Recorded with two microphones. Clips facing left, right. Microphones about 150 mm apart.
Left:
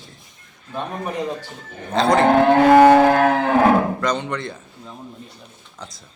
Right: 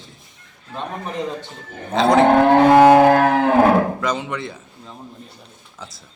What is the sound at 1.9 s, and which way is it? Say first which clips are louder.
Speech: right 2 dB; centre (ahead or behind).